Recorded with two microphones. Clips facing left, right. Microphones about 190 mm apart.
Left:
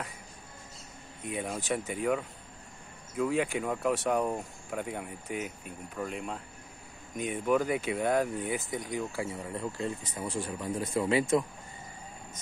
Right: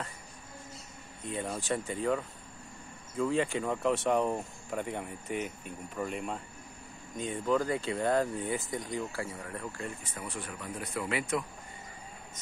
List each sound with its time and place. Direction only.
1.2 s speech: 10° left (ahead or behind)
7.2 s speech: 15° left (ahead or behind)
8.9 s speech: 15° left (ahead or behind)